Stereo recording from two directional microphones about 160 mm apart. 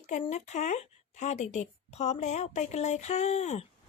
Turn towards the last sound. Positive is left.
turn(degrees=45)  # may be behind; listen again after turning